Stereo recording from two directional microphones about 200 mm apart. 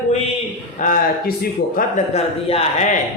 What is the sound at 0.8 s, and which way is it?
A man's voice, 45° left (ahead or behind).